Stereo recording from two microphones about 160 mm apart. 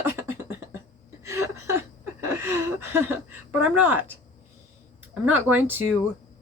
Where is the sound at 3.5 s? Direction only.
10° right (ahead or behind).